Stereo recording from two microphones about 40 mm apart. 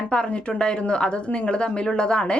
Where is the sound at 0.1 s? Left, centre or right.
Left.